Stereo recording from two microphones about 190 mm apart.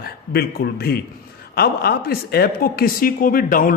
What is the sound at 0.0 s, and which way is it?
A man's voice, 55° left (ahead or behind).